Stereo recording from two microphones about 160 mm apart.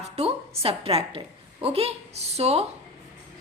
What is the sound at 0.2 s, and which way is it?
A woman's voice, 40° right (ahead or behind).